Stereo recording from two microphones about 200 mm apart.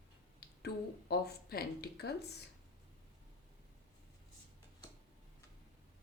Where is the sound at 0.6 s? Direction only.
50° left (ahead or behind).